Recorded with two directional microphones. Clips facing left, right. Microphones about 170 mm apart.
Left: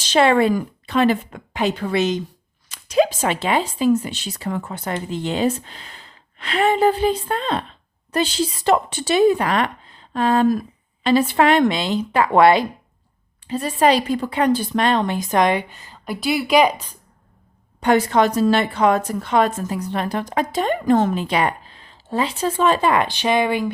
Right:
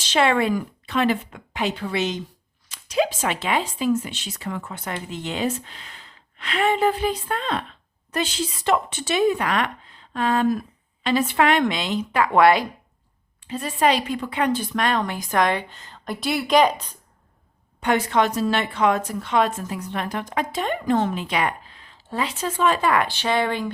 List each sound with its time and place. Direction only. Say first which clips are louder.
0.0 s speech: left 4 dB; 40° left (ahead or behind)
13.4 s speech: left 4 dB; 35° left (ahead or behind); by 17.0 s 10° left (ahead or behind)
17.7 s speech: left 4 dB; 35° left (ahead or behind); by 23.7 s 10° left (ahead or behind)